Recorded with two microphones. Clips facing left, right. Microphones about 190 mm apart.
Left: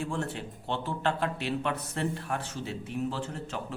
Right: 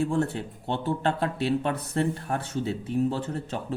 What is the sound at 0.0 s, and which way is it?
Speech, 35° right (ahead or behind).